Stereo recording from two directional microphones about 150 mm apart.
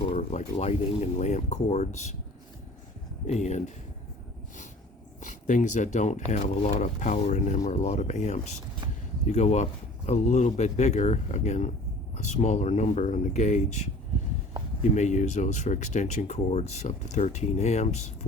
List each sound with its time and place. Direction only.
0.1 s a sound: 55° left (ahead or behind)
0.5 s speech: 45° left (ahead or behind)
3.2 s speech: 50° left (ahead or behind)
5.2 s speech: 55° left (ahead or behind)
14.9 s speech: 50° left (ahead or behind)